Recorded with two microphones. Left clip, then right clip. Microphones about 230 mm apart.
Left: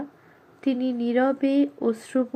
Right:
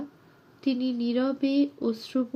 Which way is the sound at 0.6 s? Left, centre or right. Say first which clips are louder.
Left 3 dB; centre.